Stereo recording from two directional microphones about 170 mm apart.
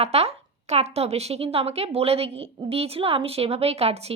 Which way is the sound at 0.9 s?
40° right (ahead or behind).